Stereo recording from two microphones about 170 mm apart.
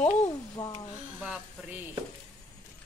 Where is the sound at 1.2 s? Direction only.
10° right (ahead or behind).